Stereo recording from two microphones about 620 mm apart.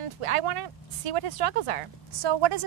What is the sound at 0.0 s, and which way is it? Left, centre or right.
Speech, right.